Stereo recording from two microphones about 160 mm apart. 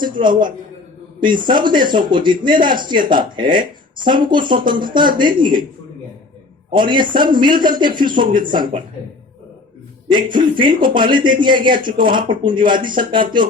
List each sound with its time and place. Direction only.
0.0 s a man's voice: 30° right (ahead or behind)
6.7 s a man's voice: 30° right (ahead or behind)
10.1 s a man's voice: 30° right (ahead or behind)